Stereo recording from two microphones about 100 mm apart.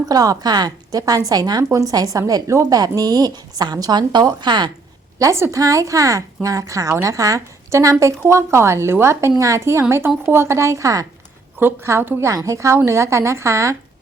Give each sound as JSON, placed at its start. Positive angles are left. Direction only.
{"t": 0.1, "sound": "a woman's voice", "side_deg": -40}
{"t": 5.2, "sound": "a woman's voice", "side_deg": -30}